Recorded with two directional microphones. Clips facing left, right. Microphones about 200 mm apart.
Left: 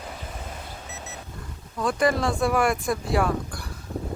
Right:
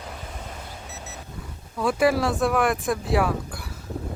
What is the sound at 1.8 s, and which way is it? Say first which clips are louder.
Speech: right 2 dB; 5° right (ahead or behind).